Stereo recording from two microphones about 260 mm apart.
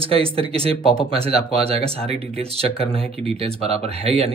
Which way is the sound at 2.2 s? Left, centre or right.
Right.